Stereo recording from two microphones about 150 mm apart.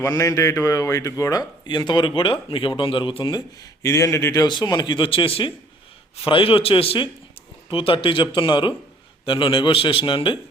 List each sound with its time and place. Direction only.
0.0 s a man's voice: 20° left (ahead or behind)